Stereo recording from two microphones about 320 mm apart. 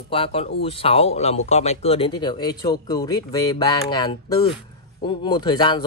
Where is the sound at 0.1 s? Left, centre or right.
Centre.